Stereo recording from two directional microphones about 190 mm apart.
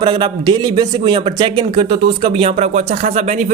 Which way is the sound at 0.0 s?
25° right (ahead or behind).